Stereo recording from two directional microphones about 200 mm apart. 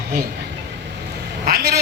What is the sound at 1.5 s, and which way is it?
Speech, 50° right (ahead or behind).